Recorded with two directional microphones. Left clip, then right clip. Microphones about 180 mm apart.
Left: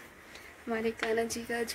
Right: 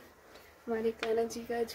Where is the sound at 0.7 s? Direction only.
5° right (ahead or behind).